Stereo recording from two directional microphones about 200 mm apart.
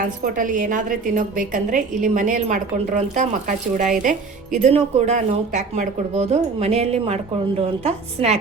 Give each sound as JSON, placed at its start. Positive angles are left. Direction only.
{"t": 0.0, "sound": "a woman's voice", "side_deg": -40}